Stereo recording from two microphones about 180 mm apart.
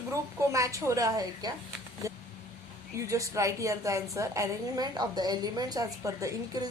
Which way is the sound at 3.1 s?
15° right (ahead or behind).